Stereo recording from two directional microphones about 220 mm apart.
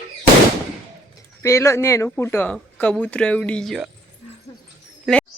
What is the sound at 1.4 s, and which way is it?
Speech, 10° left (ahead or behind).